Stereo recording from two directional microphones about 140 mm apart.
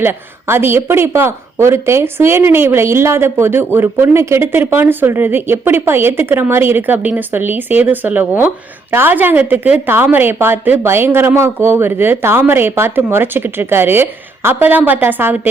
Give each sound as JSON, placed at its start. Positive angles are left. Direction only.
{"t": 0.0, "sound": "speech", "side_deg": -15}